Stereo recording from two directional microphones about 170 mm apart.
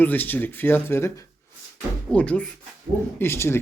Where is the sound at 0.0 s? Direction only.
10° left (ahead or behind).